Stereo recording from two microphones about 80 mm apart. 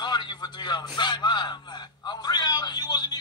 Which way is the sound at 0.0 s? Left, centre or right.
Left.